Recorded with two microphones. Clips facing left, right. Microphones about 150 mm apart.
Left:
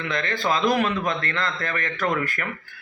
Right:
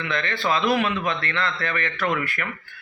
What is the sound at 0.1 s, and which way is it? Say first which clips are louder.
A man's voice: even; 40° left (ahead or behind).